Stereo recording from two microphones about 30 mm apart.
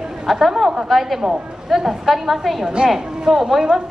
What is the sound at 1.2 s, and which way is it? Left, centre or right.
Speech, right.